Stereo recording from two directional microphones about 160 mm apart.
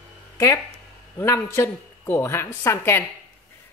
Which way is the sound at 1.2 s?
15° left (ahead or behind).